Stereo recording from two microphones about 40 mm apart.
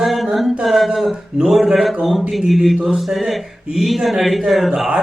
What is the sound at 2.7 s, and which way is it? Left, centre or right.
Speech, centre.